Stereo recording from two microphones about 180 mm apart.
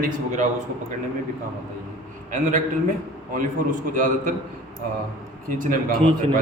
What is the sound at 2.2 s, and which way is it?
Speech, 45° right (ahead or behind).